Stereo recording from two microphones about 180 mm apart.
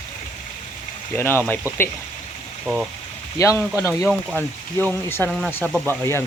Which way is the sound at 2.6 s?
5° right (ahead or behind).